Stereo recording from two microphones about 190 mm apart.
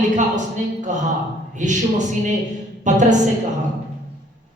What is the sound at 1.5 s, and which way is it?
A woman's voice, 40° right (ahead or behind).